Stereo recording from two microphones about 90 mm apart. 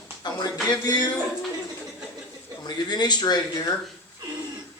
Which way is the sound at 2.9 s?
50° left (ahead or behind).